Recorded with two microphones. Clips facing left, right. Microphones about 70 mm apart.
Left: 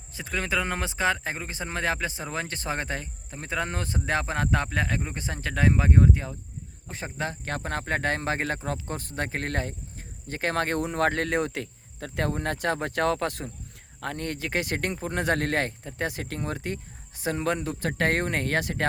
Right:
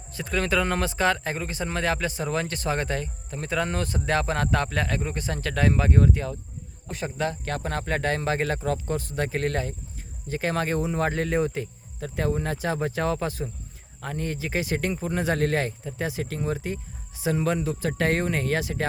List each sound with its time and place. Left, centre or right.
0.1 s speech: centre; by 11.7 s left
11.9 s speech: left